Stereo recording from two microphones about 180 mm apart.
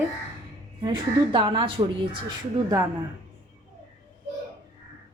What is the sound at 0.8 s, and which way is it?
Speech, 25° right (ahead or behind).